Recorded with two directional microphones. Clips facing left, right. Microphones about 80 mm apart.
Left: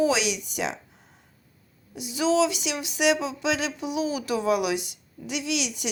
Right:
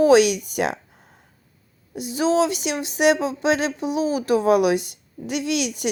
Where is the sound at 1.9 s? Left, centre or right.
Right.